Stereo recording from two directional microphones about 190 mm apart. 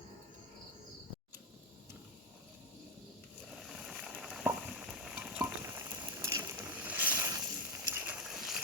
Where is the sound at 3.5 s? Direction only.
Centre (ahead or behind).